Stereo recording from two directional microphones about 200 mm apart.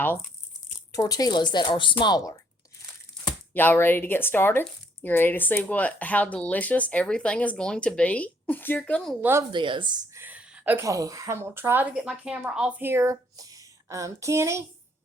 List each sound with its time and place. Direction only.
0.0 s speech: 10° left (ahead or behind)
9.5 s speech: 25° right (ahead or behind)
10.2 s a woman's voice: 5° right (ahead or behind)